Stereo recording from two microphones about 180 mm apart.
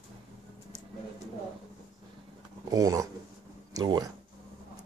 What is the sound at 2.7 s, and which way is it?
Speech, 20° right (ahead or behind).